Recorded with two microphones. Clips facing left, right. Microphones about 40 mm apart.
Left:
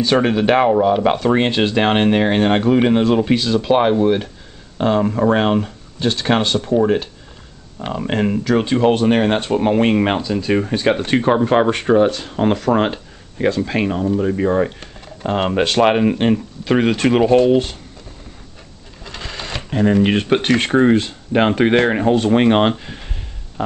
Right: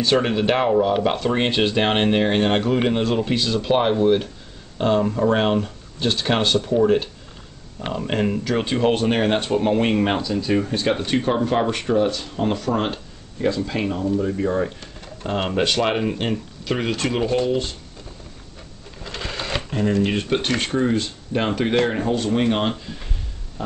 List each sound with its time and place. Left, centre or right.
0.0 s speech: centre
8.1 s speech: centre
8.5 s speech: centre
9.6 s speech: centre
11.1 s speech: left
19.0 s sewing machine: centre
19.7 s speech: left
20.7 s speech: left